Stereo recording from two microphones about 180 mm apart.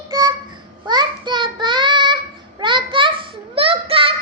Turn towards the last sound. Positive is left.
turn(degrees=-30)  # may be behind; listen again after turning